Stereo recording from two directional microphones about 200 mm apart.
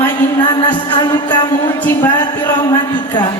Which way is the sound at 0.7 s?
20° left (ahead or behind).